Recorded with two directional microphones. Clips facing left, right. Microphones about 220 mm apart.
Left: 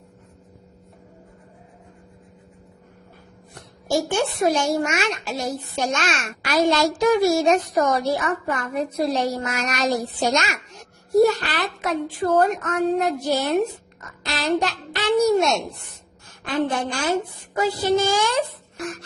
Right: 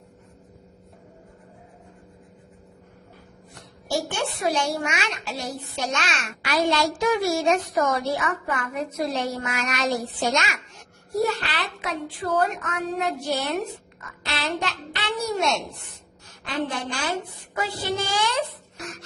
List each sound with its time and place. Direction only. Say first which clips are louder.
3.8 s a child's voice: left 5 dB; 45° left (ahead or behind)
14.0 s a sound: left 3 dB; 40° left (ahead or behind)
16.4 s speech: left 5 dB; 50° left (ahead or behind)